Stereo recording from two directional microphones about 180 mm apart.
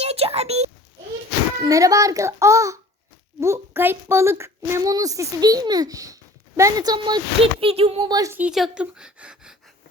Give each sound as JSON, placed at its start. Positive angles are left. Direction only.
{"t": 0.0, "sound": "a sound", "side_deg": -35}
{"t": 1.6, "sound": "a child's voice", "side_deg": -20}
{"t": 8.1, "sound": "a woman's voice", "side_deg": -20}
{"t": 8.4, "sound": "speech", "side_deg": -5}